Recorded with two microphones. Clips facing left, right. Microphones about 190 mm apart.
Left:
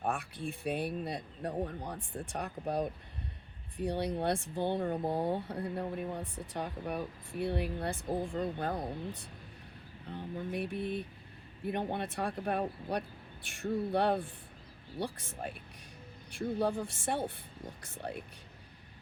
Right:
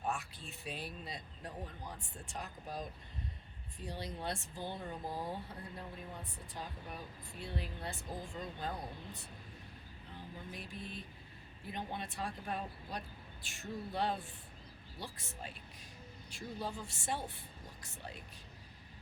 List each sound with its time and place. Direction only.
0.0 s speech: 55° left (ahead or behind)
10.1 s speech: 65° left (ahead or behind)